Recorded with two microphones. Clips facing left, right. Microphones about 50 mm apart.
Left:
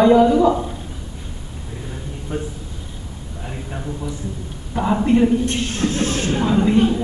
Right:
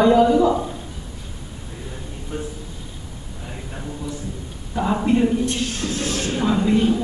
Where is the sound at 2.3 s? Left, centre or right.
Centre.